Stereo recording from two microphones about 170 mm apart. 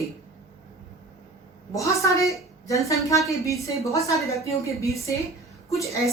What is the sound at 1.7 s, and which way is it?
Speech, 15° left (ahead or behind).